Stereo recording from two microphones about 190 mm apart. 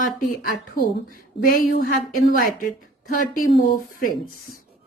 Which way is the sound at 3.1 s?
50° left (ahead or behind).